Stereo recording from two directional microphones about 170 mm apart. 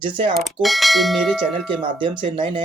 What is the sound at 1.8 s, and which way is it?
Speech, 30° right (ahead or behind).